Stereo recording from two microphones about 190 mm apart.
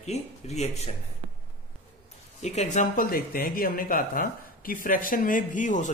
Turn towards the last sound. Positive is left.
turn(degrees=40)  # may be behind; listen again after turning